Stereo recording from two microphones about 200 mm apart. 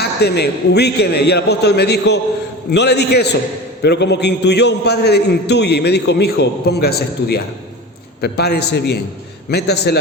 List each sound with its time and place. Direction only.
0.0 s a man's voice: 55° left (ahead or behind)